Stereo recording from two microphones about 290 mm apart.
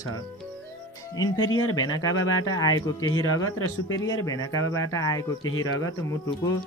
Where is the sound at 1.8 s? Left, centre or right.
Centre.